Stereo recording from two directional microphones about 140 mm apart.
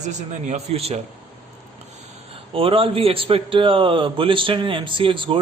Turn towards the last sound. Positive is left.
turn(degrees=-35)  # may be behind; listen again after turning